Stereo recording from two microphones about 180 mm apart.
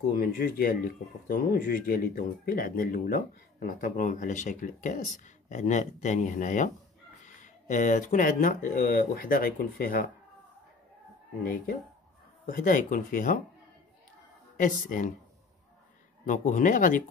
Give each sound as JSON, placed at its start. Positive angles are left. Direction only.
{"t": 0.1, "sound": "speech", "side_deg": 55}
{"t": 11.4, "sound": "speech", "side_deg": 55}
{"t": 14.6, "sound": "speech", "side_deg": 45}
{"t": 16.3, "sound": "speech", "side_deg": 45}